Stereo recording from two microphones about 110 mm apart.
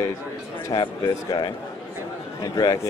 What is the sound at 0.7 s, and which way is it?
Speech, 45° left (ahead or behind).